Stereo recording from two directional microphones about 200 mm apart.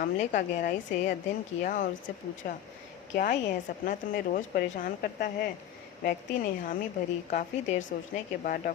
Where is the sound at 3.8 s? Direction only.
45° left (ahead or behind).